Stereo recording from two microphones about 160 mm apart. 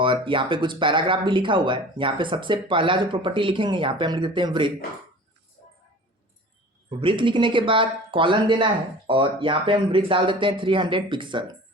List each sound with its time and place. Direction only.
0.0 s speech: 30° right (ahead or behind)
7.0 s speech: 30° right (ahead or behind)